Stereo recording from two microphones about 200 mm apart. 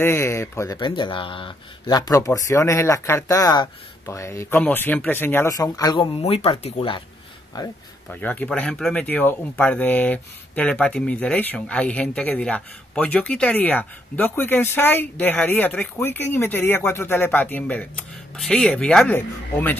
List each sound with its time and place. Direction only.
0.0 s speech: 10° left (ahead or behind)
8.1 s speech: 10° left (ahead or behind)